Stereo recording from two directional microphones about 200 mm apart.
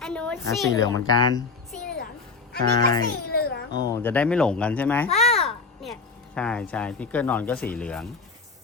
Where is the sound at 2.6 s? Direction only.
50° right (ahead or behind).